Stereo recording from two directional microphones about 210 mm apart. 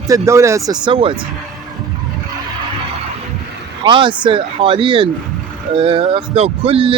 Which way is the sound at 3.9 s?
25° right (ahead or behind).